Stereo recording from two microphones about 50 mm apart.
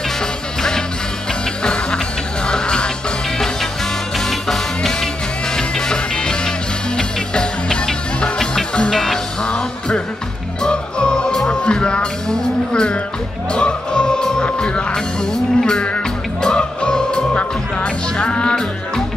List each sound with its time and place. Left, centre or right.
0.6 s music: centre
4.2 s music: centre